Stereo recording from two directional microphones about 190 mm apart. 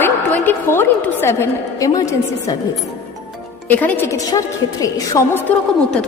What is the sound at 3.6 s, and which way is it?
A woman's voice, 10° left (ahead or behind).